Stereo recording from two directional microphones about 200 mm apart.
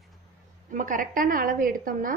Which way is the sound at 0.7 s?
40° right (ahead or behind).